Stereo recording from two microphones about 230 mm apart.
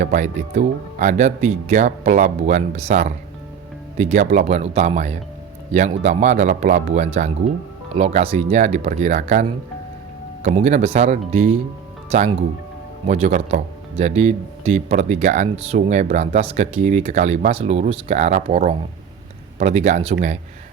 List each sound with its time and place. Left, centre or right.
0.0 s speech: right